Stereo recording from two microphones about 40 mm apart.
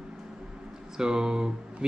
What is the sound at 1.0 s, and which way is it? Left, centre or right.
Speech, centre.